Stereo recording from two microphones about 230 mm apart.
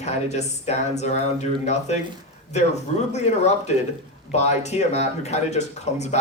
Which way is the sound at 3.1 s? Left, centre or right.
Left.